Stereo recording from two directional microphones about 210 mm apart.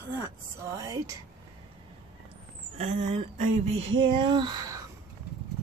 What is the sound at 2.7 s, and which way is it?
Speech, 30° right (ahead or behind).